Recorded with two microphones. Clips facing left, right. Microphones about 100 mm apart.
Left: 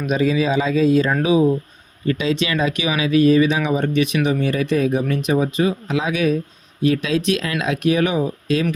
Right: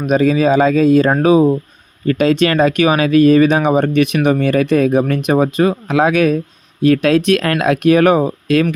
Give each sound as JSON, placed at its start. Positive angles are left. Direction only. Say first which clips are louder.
{"t": 0.0, "sound": "speech", "louder": "right 6 dB", "side_deg": -50}